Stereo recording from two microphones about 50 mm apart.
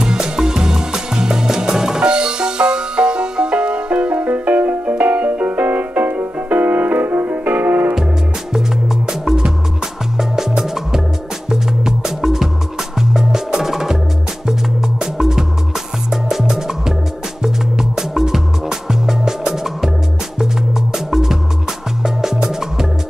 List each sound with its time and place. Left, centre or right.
0.0 s music: centre; by 7.9 s right
8.5 s music: centre
20.9 s music: centre